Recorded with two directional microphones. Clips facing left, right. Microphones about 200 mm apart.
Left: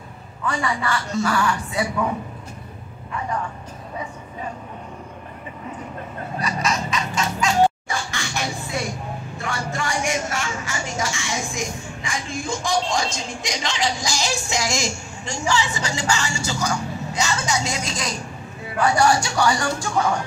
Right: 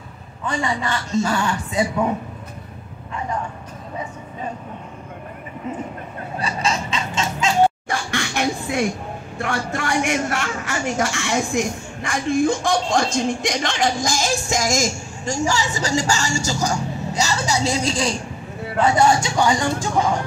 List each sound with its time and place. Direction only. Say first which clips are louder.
0.5 s a man's voice: right 1 dB; 20° right (ahead or behind)
6.4 s music: right 1 dB; 30° right (ahead or behind)
7.9 s a sound: right 4 dB; 60° right (ahead or behind)
9.4 s a man's voice: right 4 dB; 60° right (ahead or behind); by 20.2 s 20° right (ahead or behind)